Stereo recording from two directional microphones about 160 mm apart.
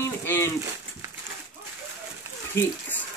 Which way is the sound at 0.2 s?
15° left (ahead or behind).